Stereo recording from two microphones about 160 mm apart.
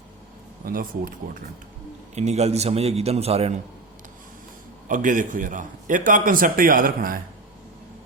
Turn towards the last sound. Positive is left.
turn(degrees=-65)  # may be behind; listen again after turning